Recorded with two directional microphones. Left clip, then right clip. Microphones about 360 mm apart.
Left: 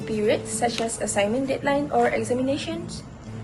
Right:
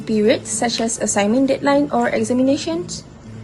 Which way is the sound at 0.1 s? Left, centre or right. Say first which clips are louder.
Right 6 dB; centre.